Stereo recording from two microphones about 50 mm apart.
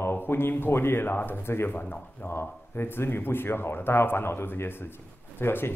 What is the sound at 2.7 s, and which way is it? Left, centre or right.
Speech, left.